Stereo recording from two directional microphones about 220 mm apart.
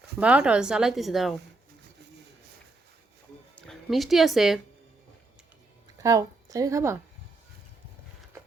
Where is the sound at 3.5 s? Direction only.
Centre (ahead or behind).